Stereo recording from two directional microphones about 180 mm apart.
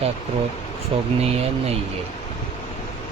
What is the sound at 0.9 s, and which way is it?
Speech, 30° right (ahead or behind).